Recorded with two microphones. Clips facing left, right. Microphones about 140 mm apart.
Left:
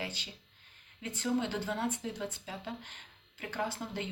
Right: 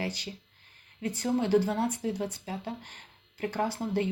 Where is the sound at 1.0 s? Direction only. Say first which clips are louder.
Right 4 dB; 35° right (ahead or behind).